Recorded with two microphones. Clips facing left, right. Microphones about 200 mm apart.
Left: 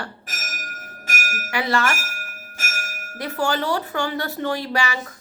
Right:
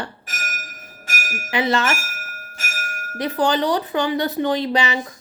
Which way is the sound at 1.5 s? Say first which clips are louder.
Right 2 dB; 20° right (ahead or behind).